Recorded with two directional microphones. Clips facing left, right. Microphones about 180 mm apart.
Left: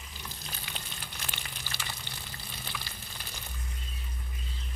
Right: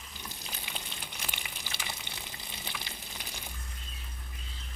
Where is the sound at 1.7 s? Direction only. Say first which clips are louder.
Even; 15° right (ahead or behind).